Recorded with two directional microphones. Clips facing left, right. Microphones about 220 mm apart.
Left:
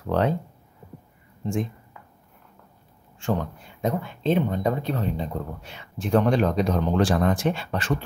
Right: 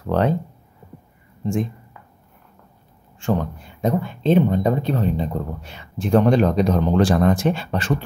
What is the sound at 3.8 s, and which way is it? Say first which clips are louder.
Speech: right 5 dB; 35° right (ahead or behind).